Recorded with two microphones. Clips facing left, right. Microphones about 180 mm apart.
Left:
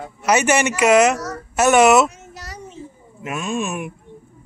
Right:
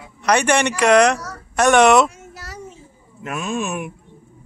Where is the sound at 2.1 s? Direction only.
5° right (ahead or behind).